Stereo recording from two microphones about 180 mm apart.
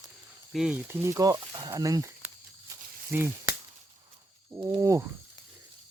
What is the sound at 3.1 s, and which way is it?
Speech, 10° right (ahead or behind).